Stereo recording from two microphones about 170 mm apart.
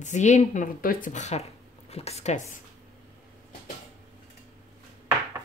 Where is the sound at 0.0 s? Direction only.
45° left (ahead or behind).